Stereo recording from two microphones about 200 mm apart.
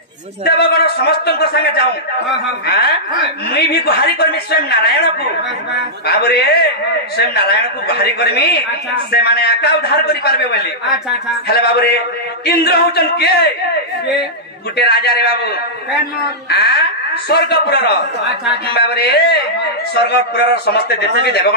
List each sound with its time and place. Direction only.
0.5 s a man's voice: 50° left (ahead or behind)
2.6 s chuckle: 50° left (ahead or behind)
3.5 s a man's voice: 55° left (ahead or behind)
14.8 s a man's voice: 55° left (ahead or behind)